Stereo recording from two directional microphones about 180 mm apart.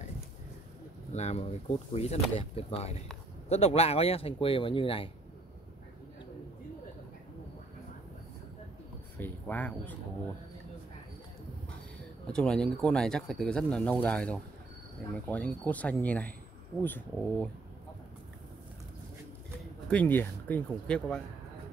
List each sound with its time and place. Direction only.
1.1 s speech: 40° left (ahead or behind)
9.2 s speech: 10° left (ahead or behind)
12.3 s speech: 5° left (ahead or behind)
19.9 s speech: 10° left (ahead or behind)